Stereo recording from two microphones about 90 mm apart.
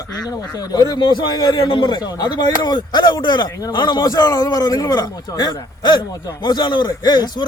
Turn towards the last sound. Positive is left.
turn(degrees=55)  # may be behind; listen again after turning